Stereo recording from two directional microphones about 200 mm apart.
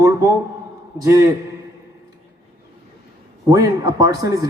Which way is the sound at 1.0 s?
15° right (ahead or behind).